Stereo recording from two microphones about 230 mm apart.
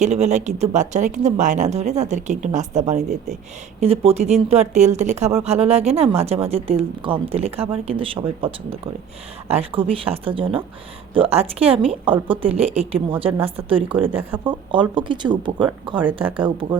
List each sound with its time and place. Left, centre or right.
0.0 s speech: right
14.0 s speech: centre
14.4 s speech: right